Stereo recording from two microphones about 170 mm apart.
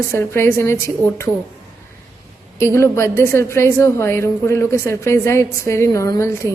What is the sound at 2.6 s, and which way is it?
A woman's voice, 15° left (ahead or behind).